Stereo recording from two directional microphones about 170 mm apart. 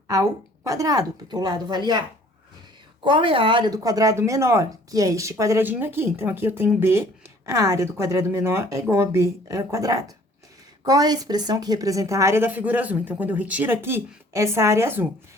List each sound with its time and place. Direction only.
0.1 s a woman's voice: 20° right (ahead or behind)